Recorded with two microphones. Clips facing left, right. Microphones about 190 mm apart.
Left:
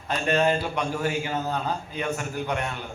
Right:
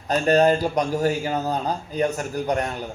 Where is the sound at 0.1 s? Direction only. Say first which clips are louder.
Right 5 dB; 40° right (ahead or behind).